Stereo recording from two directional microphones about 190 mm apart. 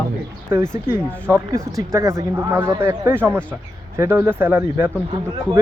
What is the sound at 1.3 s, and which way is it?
Speech, 15° right (ahead or behind).